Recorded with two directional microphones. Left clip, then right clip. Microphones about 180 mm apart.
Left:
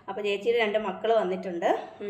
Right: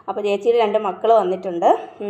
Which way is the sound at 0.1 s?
30° right (ahead or behind).